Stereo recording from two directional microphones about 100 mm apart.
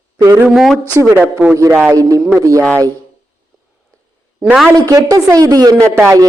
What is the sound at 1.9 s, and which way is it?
Speech, 35° right (ahead or behind).